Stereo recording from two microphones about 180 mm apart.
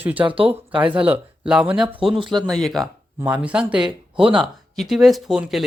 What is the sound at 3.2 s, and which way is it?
Speech, 10° right (ahead or behind).